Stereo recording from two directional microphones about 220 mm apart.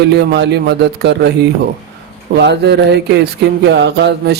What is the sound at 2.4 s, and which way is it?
A man's voice, 50° right (ahead or behind).